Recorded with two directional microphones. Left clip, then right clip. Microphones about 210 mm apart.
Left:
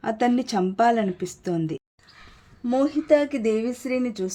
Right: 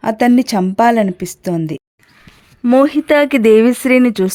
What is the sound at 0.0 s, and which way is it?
Speech, 40° right (ahead or behind).